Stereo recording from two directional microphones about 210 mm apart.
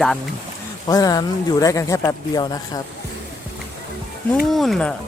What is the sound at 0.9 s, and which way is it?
Speech, 15° left (ahead or behind).